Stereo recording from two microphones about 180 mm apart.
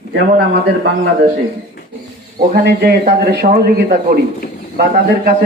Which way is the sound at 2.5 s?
65° right (ahead or behind).